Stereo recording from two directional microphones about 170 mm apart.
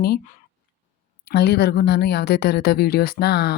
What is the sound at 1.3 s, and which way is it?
Speech, 70° left (ahead or behind).